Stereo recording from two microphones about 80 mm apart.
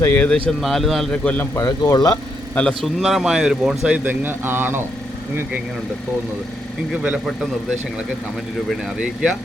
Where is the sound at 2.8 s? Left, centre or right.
Centre.